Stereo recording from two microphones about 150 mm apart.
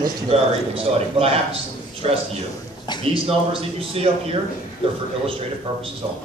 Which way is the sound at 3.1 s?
35° right (ahead or behind).